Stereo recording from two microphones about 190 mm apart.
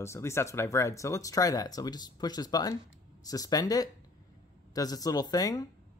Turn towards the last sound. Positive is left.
turn(degrees=20)  # may be behind; listen again after turning